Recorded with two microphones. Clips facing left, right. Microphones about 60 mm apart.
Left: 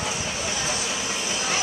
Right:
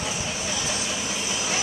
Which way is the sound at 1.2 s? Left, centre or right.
Left.